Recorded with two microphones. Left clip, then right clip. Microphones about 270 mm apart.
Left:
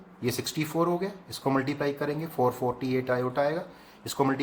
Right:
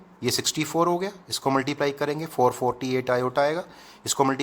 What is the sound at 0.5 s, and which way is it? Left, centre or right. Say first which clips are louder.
Speech: right 3 dB; right.